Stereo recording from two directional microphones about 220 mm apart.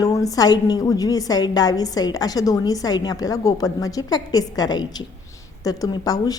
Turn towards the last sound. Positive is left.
turn(degrees=15)  # may be behind; listen again after turning